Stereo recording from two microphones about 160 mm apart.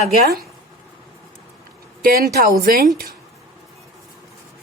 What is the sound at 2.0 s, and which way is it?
Speech, 65° right (ahead or behind).